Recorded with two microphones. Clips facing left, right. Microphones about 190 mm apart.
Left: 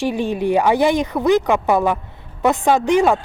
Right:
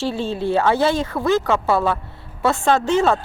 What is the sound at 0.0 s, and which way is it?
Speech, 15° left (ahead or behind).